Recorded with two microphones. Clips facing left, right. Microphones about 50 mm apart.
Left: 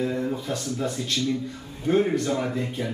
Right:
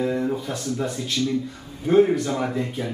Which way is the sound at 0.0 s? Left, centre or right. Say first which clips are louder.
Right 3 dB; centre.